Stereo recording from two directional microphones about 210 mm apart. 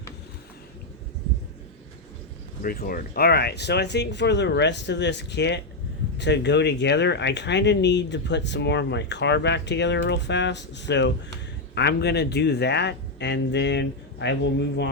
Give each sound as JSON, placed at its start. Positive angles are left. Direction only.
{"t": 2.6, "sound": "speech", "side_deg": 45}